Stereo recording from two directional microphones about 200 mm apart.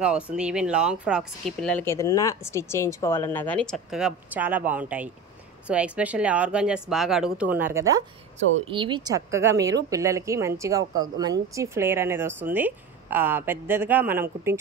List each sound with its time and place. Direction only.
0.0 s speech: 5° right (ahead or behind)
1.7 s a woman's voice: 10° left (ahead or behind); by 14.6 s 10° right (ahead or behind)